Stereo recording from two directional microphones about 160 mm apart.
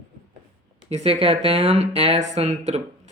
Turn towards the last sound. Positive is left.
turn(degrees=-45)  # may be behind; listen again after turning